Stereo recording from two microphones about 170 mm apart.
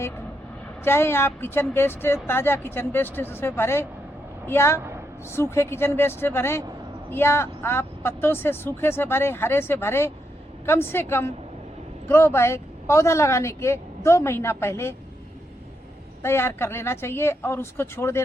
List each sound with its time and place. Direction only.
0.9 s speech: 15° left (ahead or behind)
16.2 s speech: 15° left (ahead or behind)